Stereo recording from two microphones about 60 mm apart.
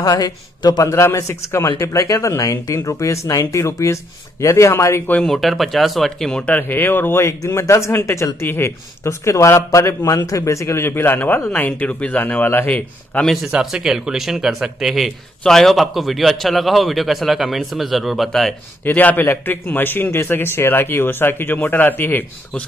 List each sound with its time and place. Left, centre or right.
0.0 s a man's voice: left
3.5 s a man's voice: left
5.2 s a man's voice: centre
6.3 s speech: centre
6.7 s speech: left
8.4 s a man's voice: left
10.8 s a man's voice: left
12.2 s speech: left
13.5 s a man's voice: centre
18.9 s a man's voice: left